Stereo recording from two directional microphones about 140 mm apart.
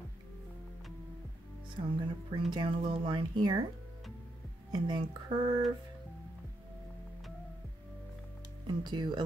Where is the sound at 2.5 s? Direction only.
35° right (ahead or behind).